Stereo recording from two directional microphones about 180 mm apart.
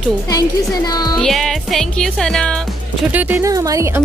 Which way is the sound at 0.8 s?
20° left (ahead or behind).